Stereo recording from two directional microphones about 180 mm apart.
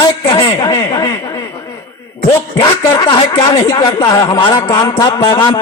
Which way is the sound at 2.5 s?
25° left (ahead or behind).